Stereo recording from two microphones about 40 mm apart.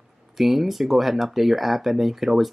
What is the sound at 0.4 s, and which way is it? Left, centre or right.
Speech, centre.